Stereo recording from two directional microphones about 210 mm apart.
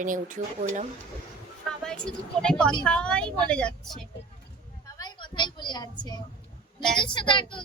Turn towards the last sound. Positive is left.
turn(degrees=25)  # may be behind; listen again after turning